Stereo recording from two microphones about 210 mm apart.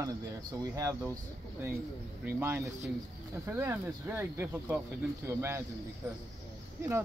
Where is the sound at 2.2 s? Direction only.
10° right (ahead or behind).